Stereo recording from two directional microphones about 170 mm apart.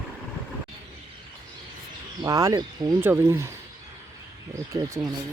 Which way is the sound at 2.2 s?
20° right (ahead or behind).